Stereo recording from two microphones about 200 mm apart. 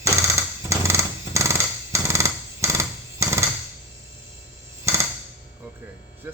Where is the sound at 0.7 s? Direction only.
15° right (ahead or behind).